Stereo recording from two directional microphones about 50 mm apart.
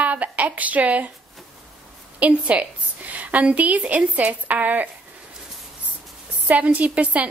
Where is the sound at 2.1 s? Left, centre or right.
Right.